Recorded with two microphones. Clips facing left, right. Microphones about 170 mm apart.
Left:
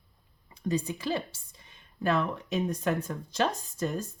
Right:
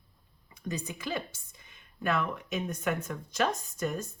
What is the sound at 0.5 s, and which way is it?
A woman's voice, 30° left (ahead or behind).